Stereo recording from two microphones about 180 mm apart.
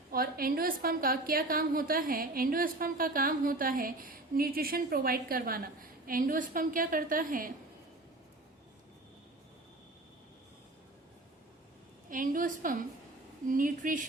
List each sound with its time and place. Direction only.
0.1 s a woman's voice: 55° right (ahead or behind)
12.1 s a woman's voice: 50° right (ahead or behind)